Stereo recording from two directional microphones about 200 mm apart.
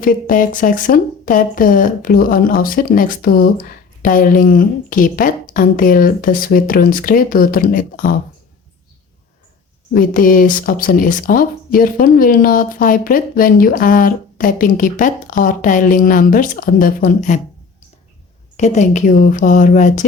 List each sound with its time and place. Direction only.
0.0 s speech: 45° left (ahead or behind)
9.9 s speech: 45° left (ahead or behind)
18.5 s a woman's voice: 35° left (ahead or behind)